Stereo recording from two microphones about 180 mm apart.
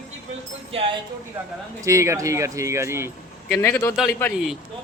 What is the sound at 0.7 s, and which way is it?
Speech, 30° right (ahead or behind).